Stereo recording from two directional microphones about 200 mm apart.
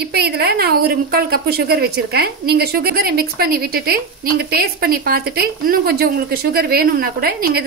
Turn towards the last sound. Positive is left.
turn(degrees=-50)  # may be behind; listen again after turning